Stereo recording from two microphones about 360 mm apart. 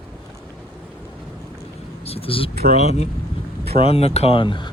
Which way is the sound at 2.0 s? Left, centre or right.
Centre.